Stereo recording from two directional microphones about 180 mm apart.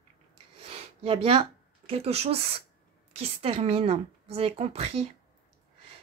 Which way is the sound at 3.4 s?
35° right (ahead or behind).